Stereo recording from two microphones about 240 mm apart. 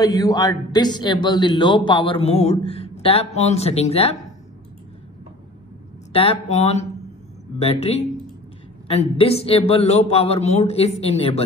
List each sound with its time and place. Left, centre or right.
0.0 s a man's voice: centre
6.1 s a man's voice: left